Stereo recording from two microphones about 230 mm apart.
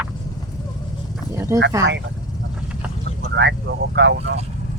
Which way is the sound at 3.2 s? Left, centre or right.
Right.